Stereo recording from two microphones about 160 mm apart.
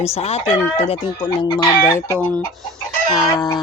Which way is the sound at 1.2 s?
30° left (ahead or behind).